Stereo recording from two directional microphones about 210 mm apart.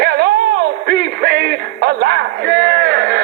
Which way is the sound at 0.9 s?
50° right (ahead or behind).